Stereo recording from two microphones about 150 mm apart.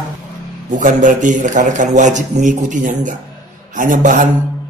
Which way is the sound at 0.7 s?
60° right (ahead or behind).